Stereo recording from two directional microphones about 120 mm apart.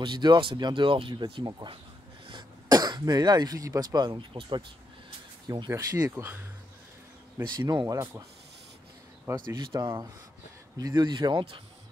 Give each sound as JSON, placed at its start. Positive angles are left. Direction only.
{"t": 0.0, "sound": "speech", "side_deg": -40}
{"t": 5.7, "sound": "speech", "side_deg": -20}
{"t": 7.4, "sound": "speech", "side_deg": -35}
{"t": 9.3, "sound": "speech", "side_deg": -25}
{"t": 10.8, "sound": "speech", "side_deg": -35}